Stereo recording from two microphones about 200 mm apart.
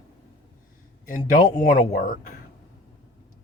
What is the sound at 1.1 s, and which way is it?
Speech, 45° left (ahead or behind).